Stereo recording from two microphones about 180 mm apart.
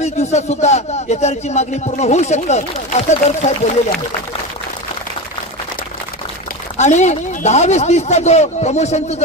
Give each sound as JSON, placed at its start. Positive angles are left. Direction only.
{"t": 0.0, "sound": "a man's voice", "side_deg": 40}
{"t": 6.8, "sound": "a man's voice", "side_deg": 40}